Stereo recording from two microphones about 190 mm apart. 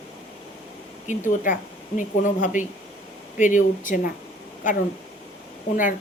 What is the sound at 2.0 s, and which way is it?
Speech, 45° left (ahead or behind).